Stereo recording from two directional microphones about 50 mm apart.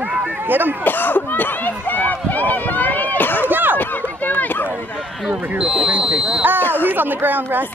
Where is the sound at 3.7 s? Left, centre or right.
Left.